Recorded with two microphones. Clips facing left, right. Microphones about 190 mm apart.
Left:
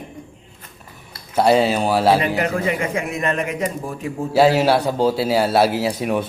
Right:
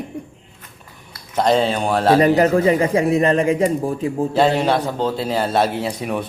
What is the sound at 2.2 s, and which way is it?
Speech, 40° right (ahead or behind).